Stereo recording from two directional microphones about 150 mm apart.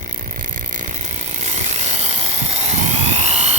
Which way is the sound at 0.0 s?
60° right (ahead or behind).